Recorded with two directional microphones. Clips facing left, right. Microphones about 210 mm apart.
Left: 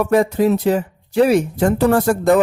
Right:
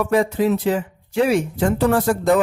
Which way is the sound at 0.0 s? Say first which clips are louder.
Left 3 dB; 45° left (ahead or behind).